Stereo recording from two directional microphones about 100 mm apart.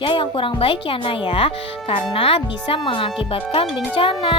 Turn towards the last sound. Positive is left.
turn(degrees=65)  # may be behind; listen again after turning